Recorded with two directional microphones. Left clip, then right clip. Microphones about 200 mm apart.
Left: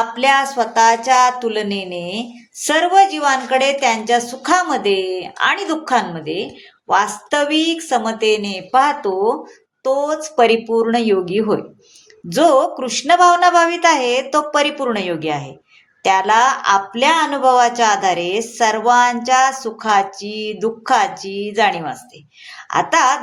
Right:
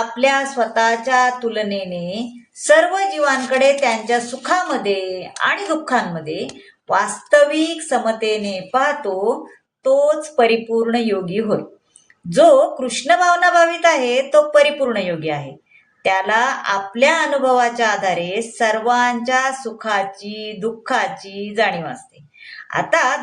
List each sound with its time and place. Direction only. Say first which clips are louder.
0.2 s a woman's voice: left 1 dB; 40° left (ahead or behind)